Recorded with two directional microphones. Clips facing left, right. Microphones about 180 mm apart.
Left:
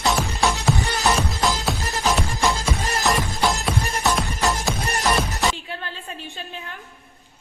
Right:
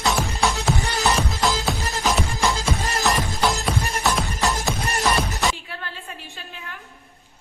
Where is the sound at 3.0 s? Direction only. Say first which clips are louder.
Left 1 dB; centre (ahead or behind).